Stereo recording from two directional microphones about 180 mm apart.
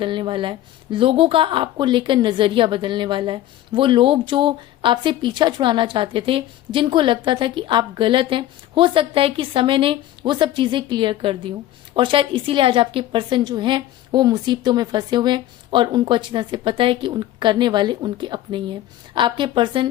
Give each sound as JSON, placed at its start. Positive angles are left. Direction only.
{"t": 0.0, "sound": "speech", "side_deg": -25}